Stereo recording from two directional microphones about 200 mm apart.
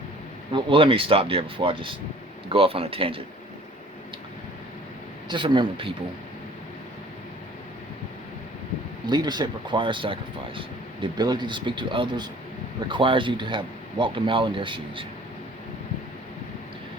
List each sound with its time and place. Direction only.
0.5 s speech: 25° right (ahead or behind)
5.3 s speech: 25° right (ahead or behind)
9.0 s speech: 20° right (ahead or behind)